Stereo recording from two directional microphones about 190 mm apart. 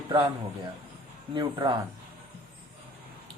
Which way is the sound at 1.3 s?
25° right (ahead or behind).